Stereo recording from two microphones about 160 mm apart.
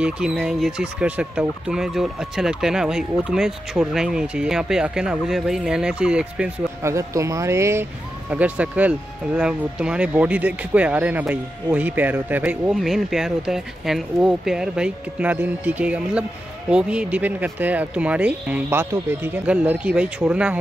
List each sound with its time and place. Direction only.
0.0 s speech: 5° right (ahead or behind)
6.8 s speech: 20° right (ahead or behind)